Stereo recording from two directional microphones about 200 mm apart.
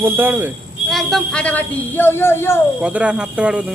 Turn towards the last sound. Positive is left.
turn(degrees=-5)  # may be behind; listen again after turning